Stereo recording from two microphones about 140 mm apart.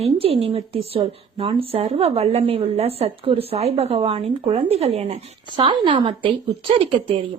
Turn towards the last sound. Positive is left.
turn(degrees=-40)  # may be behind; listen again after turning